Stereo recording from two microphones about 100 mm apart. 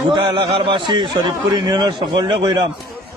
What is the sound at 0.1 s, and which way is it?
A man's voice, 55° right (ahead or behind).